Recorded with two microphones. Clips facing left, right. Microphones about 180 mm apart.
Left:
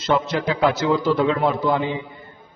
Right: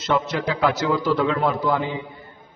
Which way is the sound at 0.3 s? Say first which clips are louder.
Left 2 dB; 25° left (ahead or behind).